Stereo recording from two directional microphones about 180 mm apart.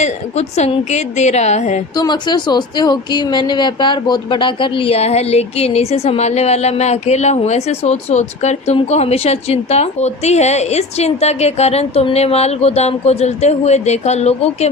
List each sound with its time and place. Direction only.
0.0 s speech: 40° left (ahead or behind)
2.0 s speech: 25° left (ahead or behind)